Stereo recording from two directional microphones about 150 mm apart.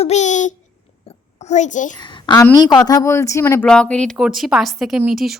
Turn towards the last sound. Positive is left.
turn(degrees=0)  # may be behind; listen again after turning